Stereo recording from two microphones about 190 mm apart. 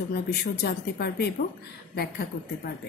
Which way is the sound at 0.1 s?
55° left (ahead or behind).